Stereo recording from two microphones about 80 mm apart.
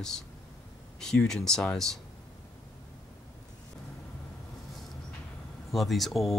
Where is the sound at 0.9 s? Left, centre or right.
Centre.